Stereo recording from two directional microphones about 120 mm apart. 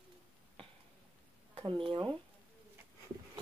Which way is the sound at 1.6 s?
45° right (ahead or behind).